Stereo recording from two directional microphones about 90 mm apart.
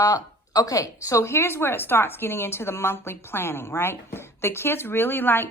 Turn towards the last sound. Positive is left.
turn(degrees=25)  # may be behind; listen again after turning